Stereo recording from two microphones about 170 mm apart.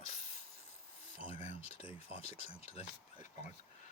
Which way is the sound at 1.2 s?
35° left (ahead or behind).